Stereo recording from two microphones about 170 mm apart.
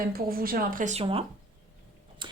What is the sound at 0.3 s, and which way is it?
Speech, 60° right (ahead or behind).